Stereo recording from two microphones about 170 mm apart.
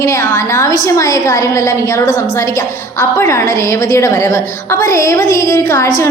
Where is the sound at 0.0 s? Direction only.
15° left (ahead or behind).